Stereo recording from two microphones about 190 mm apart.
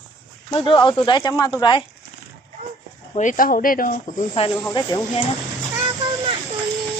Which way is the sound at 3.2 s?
45° left (ahead or behind).